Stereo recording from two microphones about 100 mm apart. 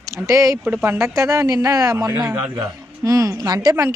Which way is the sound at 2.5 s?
30° right (ahead or behind).